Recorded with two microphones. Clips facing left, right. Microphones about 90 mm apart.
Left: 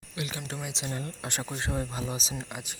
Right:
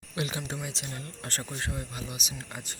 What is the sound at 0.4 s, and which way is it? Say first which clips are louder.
Speech: right 1 dB; 5° right (ahead or behind).